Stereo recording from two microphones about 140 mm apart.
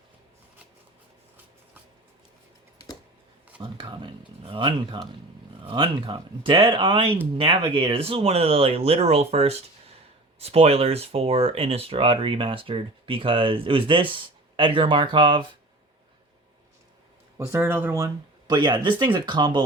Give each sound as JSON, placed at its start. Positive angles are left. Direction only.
{"t": 2.7, "sound": "typing", "side_deg": 25}
{"t": 3.6, "sound": "speech", "side_deg": -35}
{"t": 17.3, "sound": "speech", "side_deg": -15}